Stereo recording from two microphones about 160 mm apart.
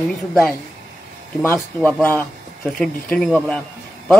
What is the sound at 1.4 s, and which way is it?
A man's voice, 10° left (ahead or behind).